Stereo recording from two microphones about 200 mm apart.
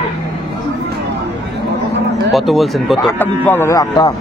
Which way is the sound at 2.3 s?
Centre (ahead or behind).